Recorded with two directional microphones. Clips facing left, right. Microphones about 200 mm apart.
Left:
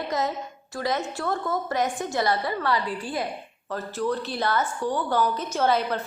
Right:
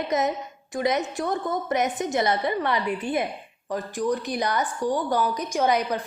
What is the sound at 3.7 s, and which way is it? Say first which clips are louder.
A woman's voice: right 2 dB; 15° right (ahead or behind).